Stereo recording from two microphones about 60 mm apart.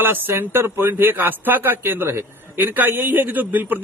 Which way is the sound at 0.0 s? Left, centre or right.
Right.